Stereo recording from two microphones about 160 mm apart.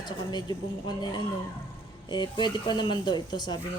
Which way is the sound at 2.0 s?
25° left (ahead or behind).